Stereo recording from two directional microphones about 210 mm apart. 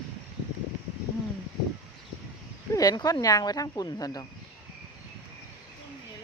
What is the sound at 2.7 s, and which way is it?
Speech, 15° left (ahead or behind).